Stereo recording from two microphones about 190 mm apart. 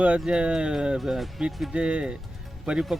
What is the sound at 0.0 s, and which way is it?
Speech, 5° right (ahead or behind).